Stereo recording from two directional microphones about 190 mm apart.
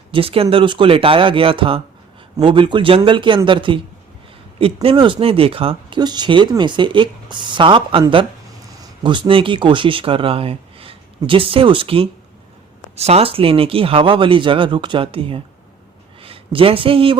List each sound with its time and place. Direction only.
0.1 s speech: 30° right (ahead or behind)